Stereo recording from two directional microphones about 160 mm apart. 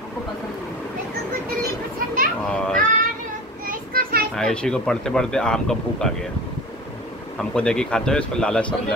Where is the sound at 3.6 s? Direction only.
65° right (ahead or behind).